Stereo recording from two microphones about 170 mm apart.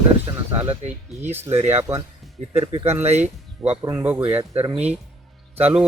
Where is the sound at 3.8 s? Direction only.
15° right (ahead or behind).